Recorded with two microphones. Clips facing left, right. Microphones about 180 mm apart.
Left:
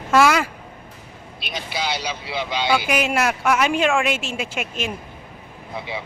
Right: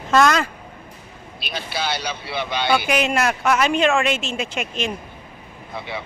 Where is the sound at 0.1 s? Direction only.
10° left (ahead or behind).